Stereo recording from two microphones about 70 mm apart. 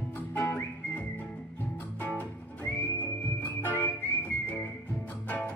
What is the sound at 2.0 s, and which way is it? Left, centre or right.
Music, left.